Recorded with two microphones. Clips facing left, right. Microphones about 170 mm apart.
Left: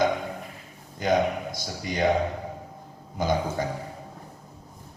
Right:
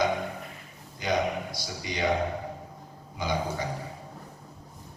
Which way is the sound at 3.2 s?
50° left (ahead or behind).